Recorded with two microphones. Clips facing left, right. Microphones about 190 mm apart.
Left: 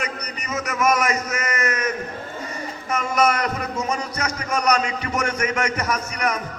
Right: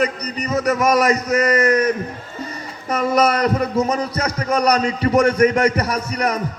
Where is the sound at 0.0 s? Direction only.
35° right (ahead or behind).